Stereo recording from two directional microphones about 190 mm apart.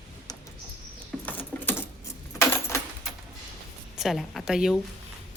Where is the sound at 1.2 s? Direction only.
10° left (ahead or behind).